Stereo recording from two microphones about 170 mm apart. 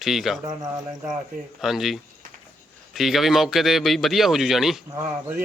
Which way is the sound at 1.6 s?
Centre (ahead or behind).